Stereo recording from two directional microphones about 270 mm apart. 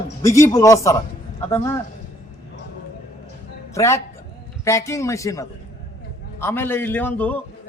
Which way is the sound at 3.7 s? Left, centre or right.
Centre.